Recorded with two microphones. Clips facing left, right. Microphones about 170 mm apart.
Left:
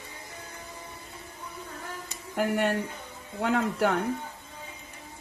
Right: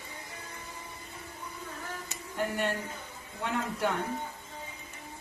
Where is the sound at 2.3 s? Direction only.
75° left (ahead or behind).